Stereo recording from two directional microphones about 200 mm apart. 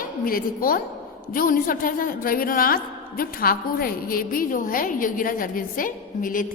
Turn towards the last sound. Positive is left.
turn(degrees=40)  # may be behind; listen again after turning